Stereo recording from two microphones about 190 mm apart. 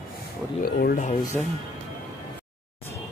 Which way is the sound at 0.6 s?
50° left (ahead or behind).